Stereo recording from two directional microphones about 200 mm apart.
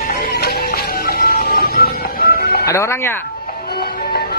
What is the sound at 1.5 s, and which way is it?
Music, 50° left (ahead or behind).